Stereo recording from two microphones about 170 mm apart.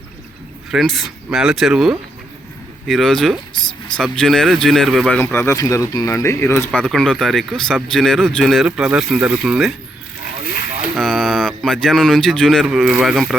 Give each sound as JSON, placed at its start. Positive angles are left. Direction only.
{"t": 0.7, "sound": "speech", "side_deg": 0}
{"t": 5.2, "sound": "speech", "side_deg": 15}
{"t": 6.7, "sound": "speech", "side_deg": 5}
{"t": 10.9, "sound": "speech", "side_deg": 0}